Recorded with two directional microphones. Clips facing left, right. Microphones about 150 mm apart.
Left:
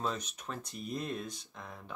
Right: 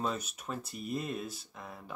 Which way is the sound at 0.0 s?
5° right (ahead or behind).